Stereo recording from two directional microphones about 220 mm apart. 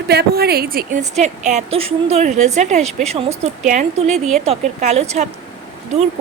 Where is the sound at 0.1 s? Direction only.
45° right (ahead or behind).